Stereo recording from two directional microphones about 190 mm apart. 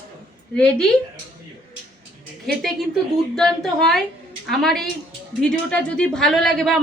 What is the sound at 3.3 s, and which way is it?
A woman's voice, 5° left (ahead or behind).